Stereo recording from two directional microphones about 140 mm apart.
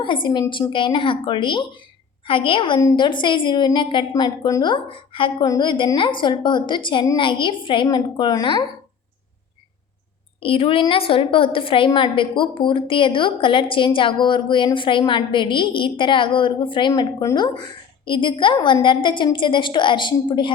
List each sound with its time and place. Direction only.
0.0 s a woman's voice: 35° left (ahead or behind)
10.4 s a woman's voice: 40° left (ahead or behind)